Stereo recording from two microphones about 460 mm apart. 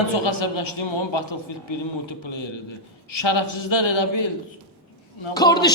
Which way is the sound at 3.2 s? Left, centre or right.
Left.